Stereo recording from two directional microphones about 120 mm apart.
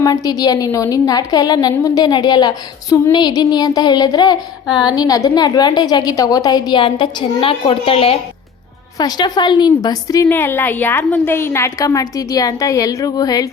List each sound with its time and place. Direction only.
0.0 s a woman's voice: 30° left (ahead or behind); by 8.2 s 55° left (ahead or behind)
9.0 s a woman's voice: 35° left (ahead or behind)
10.2 s a woman's voice: 15° left (ahead or behind); by 13.5 s 30° left (ahead or behind)